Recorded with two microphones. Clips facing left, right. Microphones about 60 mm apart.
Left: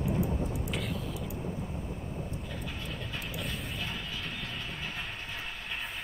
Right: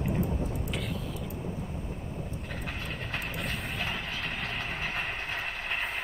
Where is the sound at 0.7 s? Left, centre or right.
Centre.